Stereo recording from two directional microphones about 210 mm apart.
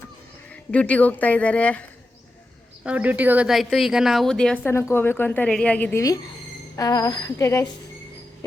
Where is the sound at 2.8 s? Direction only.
5° right (ahead or behind).